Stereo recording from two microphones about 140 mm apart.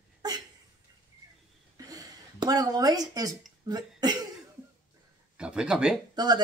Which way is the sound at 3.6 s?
30° right (ahead or behind).